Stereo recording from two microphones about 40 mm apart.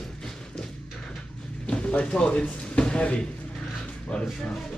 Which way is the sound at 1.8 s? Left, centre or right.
Left.